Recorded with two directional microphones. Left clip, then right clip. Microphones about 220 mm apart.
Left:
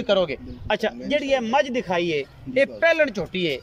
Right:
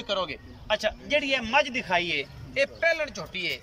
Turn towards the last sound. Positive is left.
turn(degrees=40)  # may be behind; listen again after turning